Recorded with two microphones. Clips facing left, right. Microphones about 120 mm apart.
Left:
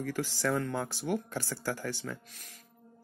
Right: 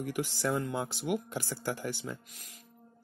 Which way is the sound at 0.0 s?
20° right (ahead or behind).